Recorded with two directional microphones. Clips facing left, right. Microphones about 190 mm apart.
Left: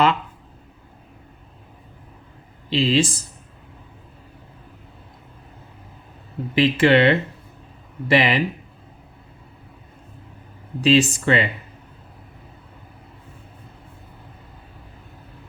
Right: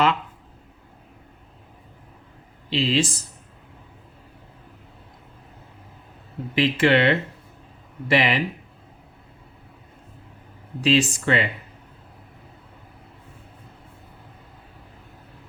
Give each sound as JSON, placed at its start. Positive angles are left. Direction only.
{"t": 2.6, "sound": "speech", "side_deg": 35}
{"t": 6.6, "sound": "speech", "side_deg": 30}
{"t": 10.8, "sound": "speech", "side_deg": 30}